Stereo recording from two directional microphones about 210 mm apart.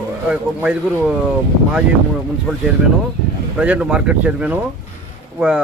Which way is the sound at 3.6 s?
5° right (ahead or behind).